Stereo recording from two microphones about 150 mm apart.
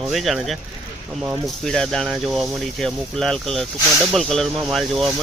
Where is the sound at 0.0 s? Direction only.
Centre (ahead or behind).